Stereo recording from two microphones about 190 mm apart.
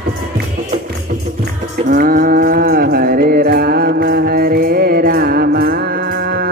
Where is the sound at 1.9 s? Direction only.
50° right (ahead or behind).